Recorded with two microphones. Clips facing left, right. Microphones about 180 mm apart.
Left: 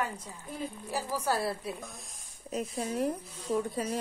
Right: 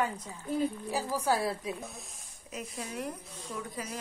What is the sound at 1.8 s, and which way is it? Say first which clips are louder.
Speech: right 2 dB; centre (ahead or behind).